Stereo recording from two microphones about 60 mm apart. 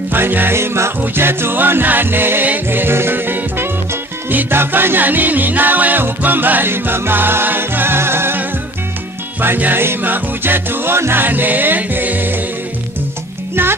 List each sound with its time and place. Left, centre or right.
0.1 s music: right
9.4 s music: right